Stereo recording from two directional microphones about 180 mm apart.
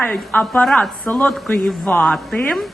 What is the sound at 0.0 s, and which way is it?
A woman's voice, 5° left (ahead or behind).